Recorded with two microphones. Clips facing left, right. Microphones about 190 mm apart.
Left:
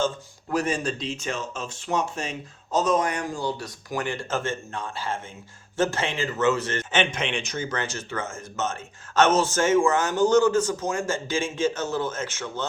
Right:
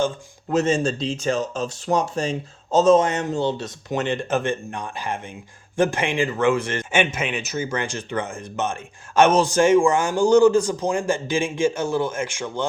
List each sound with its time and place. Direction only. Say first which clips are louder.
0.5 s a man's voice: right 6 dB; 25° right (ahead or behind)